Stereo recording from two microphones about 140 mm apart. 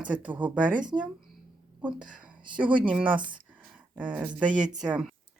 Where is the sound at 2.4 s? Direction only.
35° right (ahead or behind).